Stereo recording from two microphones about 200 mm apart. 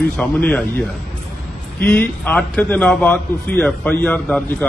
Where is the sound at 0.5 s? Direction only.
5° left (ahead or behind).